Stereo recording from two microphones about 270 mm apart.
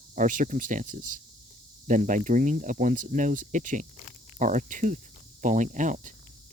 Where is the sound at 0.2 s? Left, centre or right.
Right.